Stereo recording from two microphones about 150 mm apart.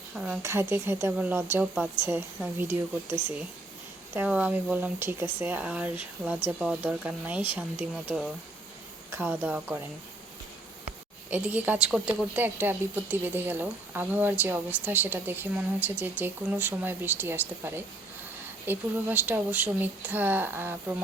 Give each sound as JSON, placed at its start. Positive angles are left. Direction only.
{"t": 0.1, "sound": "speech", "side_deg": -5}
{"t": 0.4, "sound": "speech", "side_deg": -15}
{"t": 11.3, "sound": "speech", "side_deg": -10}